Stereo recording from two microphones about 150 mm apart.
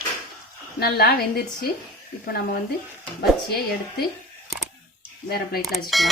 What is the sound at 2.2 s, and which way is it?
Speech, 75° left (ahead or behind).